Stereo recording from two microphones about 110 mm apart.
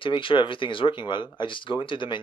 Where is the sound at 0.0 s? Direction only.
50° left (ahead or behind).